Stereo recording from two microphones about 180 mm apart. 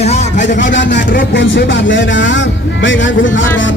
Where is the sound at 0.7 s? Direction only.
85° left.